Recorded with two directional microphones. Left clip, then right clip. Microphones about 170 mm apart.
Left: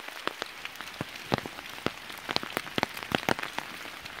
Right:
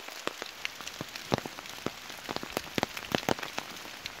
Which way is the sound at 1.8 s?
15° left (ahead or behind).